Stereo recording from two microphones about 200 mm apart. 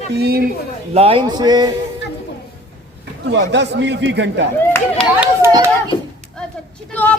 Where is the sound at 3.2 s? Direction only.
60° right (ahead or behind).